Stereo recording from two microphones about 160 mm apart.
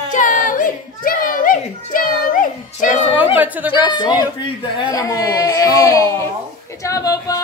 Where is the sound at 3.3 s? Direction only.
10° right (ahead or behind).